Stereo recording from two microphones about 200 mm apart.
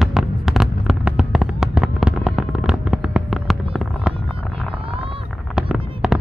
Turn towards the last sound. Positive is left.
turn(degrees=-5)  # may be behind; listen again after turning